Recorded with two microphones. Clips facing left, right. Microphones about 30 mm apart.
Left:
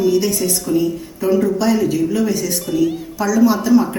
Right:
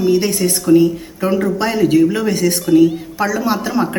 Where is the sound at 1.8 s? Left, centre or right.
Right.